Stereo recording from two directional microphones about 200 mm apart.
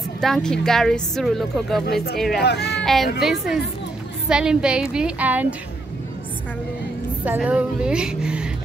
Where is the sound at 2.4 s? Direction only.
55° left (ahead or behind).